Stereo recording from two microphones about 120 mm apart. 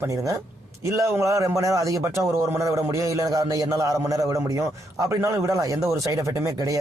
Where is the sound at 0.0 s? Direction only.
25° right (ahead or behind).